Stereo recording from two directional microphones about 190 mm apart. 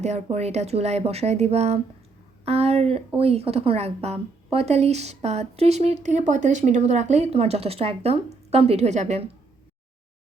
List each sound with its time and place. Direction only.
0.0 s speech: 35° right (ahead or behind)